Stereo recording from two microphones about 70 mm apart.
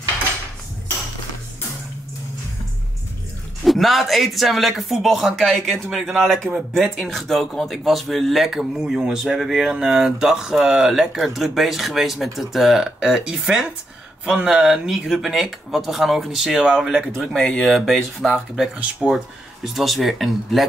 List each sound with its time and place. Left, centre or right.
3.6 s speech: centre
17.4 s speech: centre
18.8 s speech: centre